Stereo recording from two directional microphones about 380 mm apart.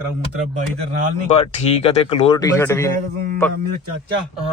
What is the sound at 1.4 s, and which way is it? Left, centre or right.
Speech, centre.